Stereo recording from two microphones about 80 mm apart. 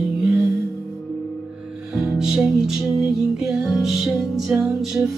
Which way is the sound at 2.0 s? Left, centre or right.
Centre.